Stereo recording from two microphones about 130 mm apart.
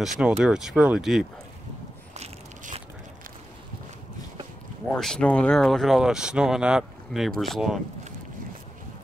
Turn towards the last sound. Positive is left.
turn(degrees=0)  # may be behind; listen again after turning